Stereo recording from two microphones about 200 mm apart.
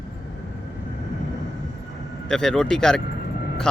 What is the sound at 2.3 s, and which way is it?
Speech, 5° left (ahead or behind).